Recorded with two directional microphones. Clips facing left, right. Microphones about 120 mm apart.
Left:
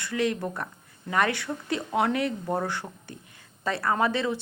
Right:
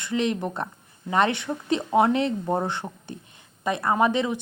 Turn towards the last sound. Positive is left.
turn(degrees=-20)  # may be behind; listen again after turning